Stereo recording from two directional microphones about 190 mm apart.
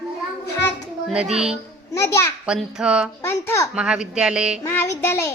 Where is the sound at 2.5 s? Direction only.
5° right (ahead or behind).